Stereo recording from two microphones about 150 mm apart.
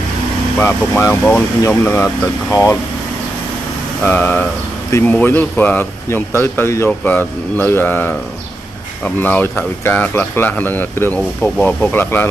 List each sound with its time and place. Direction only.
0.6 s speech: 15° left (ahead or behind)
4.0 s speech: 10° left (ahead or behind)